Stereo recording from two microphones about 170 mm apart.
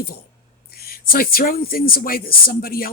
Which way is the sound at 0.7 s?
60° left (ahead or behind).